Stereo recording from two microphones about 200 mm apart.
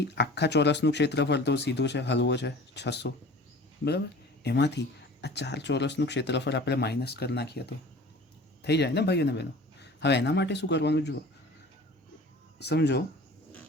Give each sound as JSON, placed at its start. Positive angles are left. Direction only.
{"t": 0.0, "sound": "speech", "side_deg": 55}
{"t": 4.4, "sound": "speech", "side_deg": 60}
{"t": 12.5, "sound": "speech", "side_deg": 55}